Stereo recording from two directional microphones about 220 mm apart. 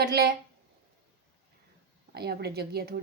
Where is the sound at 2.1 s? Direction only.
45° right (ahead or behind).